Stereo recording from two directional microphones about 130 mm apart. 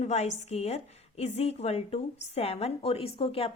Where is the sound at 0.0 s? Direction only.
60° left (ahead or behind).